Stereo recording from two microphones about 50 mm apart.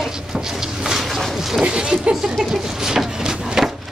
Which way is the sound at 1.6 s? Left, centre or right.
Centre.